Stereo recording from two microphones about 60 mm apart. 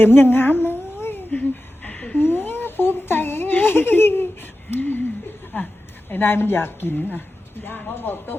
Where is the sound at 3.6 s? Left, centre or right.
Left.